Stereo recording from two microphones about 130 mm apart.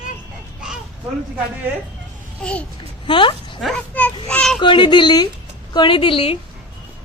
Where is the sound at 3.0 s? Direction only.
40° left (ahead or behind).